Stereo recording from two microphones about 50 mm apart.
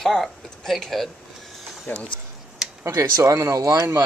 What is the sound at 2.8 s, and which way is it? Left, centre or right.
Speech, right.